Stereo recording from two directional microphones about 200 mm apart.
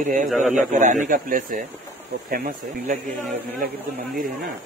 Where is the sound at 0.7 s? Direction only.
40° right (ahead or behind).